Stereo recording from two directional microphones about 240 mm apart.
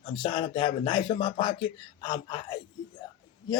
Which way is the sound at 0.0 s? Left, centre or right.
Left.